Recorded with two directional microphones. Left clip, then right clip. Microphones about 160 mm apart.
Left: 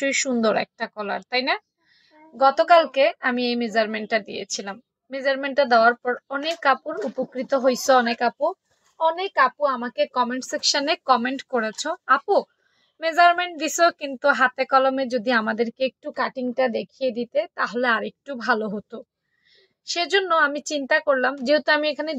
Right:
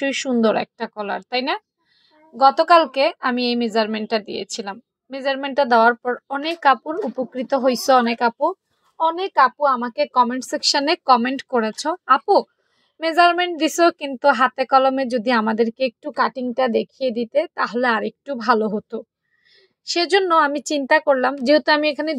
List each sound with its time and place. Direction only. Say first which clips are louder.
0.1 s a woman's voice: right 2 dB; 30° right (ahead or behind)